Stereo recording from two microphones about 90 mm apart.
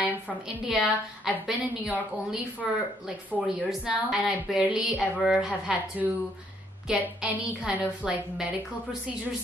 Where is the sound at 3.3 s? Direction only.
Centre (ahead or behind).